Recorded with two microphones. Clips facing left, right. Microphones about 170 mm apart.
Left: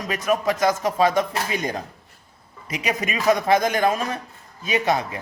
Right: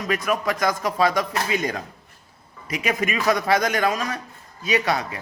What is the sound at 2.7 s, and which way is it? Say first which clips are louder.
A man's voice: right 1 dB; 20° left (ahead or behind).